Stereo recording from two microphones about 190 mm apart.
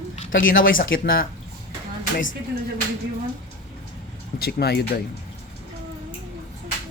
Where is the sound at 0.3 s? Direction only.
45° left (ahead or behind).